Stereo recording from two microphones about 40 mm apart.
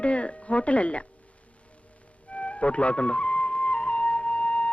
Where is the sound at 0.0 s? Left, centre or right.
Left.